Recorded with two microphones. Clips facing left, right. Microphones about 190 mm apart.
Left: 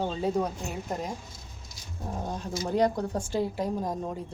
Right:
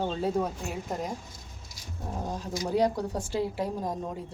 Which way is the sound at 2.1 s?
Centre (ahead or behind).